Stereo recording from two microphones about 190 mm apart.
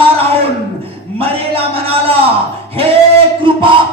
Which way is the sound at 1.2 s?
30° right (ahead or behind).